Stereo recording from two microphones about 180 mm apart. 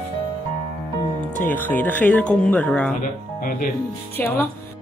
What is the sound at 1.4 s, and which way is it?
Speech, 10° left (ahead or behind).